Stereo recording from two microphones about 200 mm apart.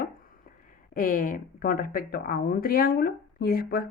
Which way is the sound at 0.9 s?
45° left (ahead or behind).